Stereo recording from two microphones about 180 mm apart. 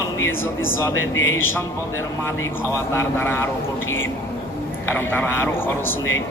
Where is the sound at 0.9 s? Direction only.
90° left.